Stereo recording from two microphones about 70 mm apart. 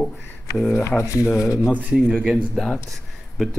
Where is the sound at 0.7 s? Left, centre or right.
Left.